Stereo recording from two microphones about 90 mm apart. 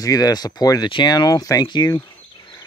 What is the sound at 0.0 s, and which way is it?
Speech, 45° left (ahead or behind).